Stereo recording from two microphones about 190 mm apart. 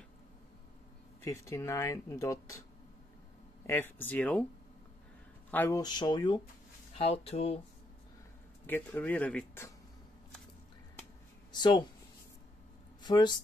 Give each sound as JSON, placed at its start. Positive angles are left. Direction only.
{"t": 1.2, "sound": "speech", "side_deg": 15}
{"t": 3.6, "sound": "speech", "side_deg": 10}
{"t": 5.5, "sound": "speech", "side_deg": 10}
{"t": 5.8, "sound": "speech", "side_deg": 20}
{"t": 8.6, "sound": "speech", "side_deg": 10}
{"t": 11.5, "sound": "speech", "side_deg": 20}
{"t": 13.0, "sound": "speech", "side_deg": 20}